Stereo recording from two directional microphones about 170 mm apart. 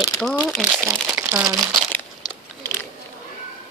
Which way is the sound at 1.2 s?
5° right (ahead or behind).